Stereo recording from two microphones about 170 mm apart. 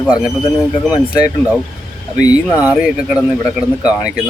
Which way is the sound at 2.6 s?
5° right (ahead or behind).